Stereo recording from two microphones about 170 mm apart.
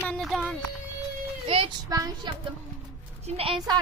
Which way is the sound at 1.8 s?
20° right (ahead or behind).